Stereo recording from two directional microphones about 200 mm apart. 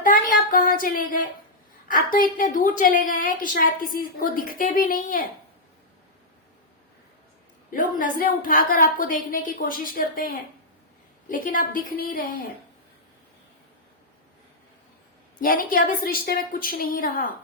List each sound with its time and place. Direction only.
0.0 s a sound: 45° left (ahead or behind)
1.9 s a woman's voice: 45° left (ahead or behind)
7.7 s a woman's voice: 45° left (ahead or behind)
15.4 s a woman's voice: 45° left (ahead or behind)